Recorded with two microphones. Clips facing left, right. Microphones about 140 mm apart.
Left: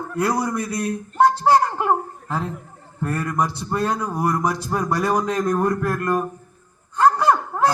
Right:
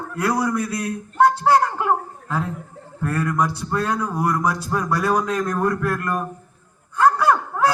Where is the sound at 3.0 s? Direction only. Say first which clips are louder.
Right 1 dB; 15° left (ahead or behind).